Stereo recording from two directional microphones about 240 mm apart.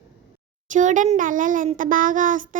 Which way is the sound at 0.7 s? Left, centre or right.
Right.